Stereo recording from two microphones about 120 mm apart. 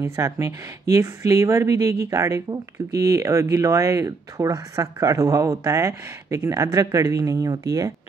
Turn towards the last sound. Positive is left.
turn(degrees=-30)  # may be behind; listen again after turning